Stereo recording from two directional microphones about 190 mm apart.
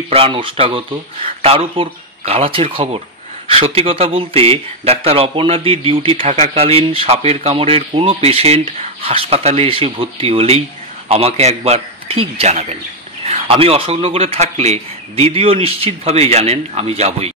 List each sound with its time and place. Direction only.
0.1 s speech: 30° right (ahead or behind)